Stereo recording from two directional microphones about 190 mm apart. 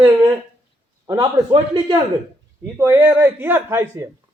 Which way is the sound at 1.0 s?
20° right (ahead or behind).